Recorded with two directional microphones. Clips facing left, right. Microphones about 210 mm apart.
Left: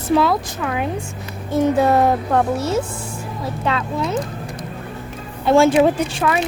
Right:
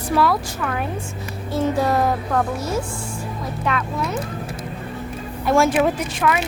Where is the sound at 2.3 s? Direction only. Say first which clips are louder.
Left 4 dB; 25° left (ahead or behind).